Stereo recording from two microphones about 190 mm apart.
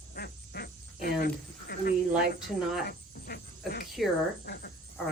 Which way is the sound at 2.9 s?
55° left (ahead or behind).